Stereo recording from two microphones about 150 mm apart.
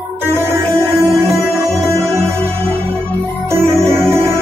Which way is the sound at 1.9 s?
20° right (ahead or behind).